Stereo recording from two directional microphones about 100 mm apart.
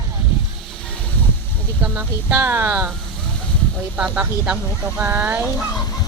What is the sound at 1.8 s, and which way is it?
Speech, 15° right (ahead or behind).